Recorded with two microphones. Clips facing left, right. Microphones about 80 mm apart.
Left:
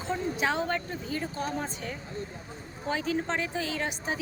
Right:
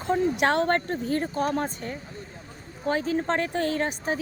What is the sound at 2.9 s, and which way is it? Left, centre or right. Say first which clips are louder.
Speech: right 4 dB; right.